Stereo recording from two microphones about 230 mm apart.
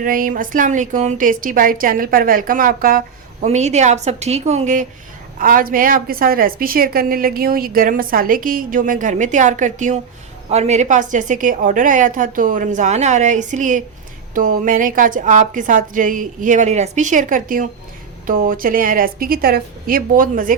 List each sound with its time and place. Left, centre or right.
0.0 s a woman's voice: right